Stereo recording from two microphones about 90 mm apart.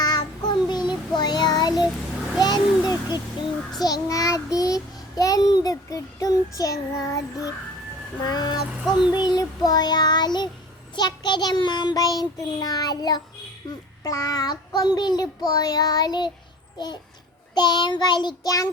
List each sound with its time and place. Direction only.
0.0 s child singing: 50° left (ahead or behind)
17.5 s child singing: 55° left (ahead or behind)